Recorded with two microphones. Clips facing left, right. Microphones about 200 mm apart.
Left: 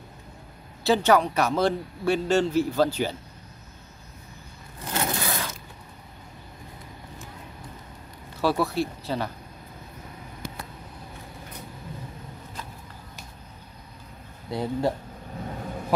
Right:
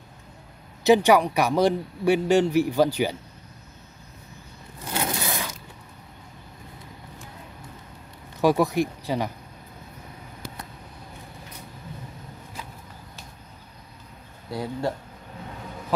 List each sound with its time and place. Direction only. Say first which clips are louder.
0.8 s a man's voice: right 3 dB; 15° right (ahead or behind)
4.8 s scrape: even; 15° right (ahead or behind)
8.4 s a man's voice: right 4 dB; 15° right (ahead or behind)
14.5 s speech: left 2 dB; 20° left (ahead or behind)